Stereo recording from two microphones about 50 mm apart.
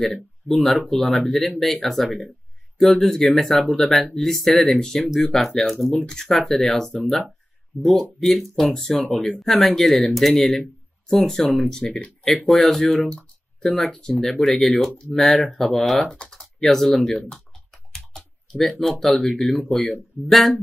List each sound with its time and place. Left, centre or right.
0.0 s speech: centre
8.2 s speech: centre; by 12.4 s left
12.4 s speech: centre
12.9 s a sound: centre
13.9 s speech: centre